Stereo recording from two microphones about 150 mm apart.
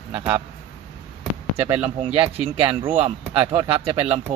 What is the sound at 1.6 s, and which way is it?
Speech, 10° right (ahead or behind).